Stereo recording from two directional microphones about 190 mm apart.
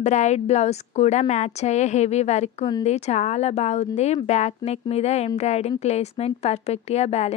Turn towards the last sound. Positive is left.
turn(degrees=35)  # may be behind; listen again after turning